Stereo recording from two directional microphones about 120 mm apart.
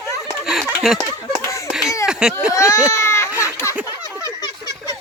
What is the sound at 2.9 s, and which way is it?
Baby cry, 25° left (ahead or behind).